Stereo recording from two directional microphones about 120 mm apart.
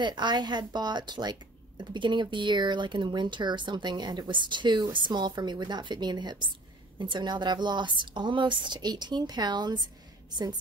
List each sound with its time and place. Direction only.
0.0 s a woman's voice: 40° right (ahead or behind)